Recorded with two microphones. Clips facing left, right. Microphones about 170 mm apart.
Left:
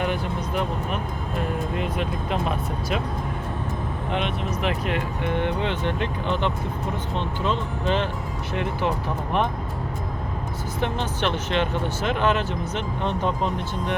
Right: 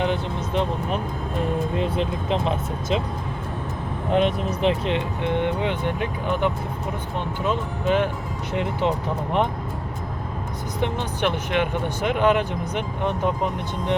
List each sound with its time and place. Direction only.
0.0 s music: 20° right (ahead or behind)
1.8 s speech: 25° right (ahead or behind)
4.1 s speech: 40° right (ahead or behind)
4.9 s speech: 25° right (ahead or behind)
10.8 s speech: 15° right (ahead or behind)